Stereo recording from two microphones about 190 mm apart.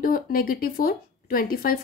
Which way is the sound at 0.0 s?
50° left (ahead or behind).